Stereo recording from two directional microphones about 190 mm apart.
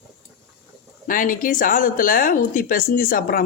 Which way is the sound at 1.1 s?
45° left (ahead or behind).